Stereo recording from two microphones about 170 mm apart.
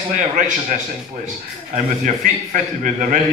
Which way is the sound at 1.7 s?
50° right (ahead or behind).